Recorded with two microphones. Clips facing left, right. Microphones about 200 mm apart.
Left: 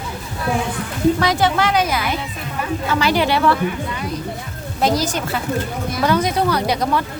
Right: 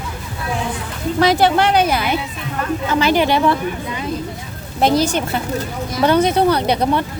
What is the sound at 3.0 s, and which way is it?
Speech, 20° right (ahead or behind).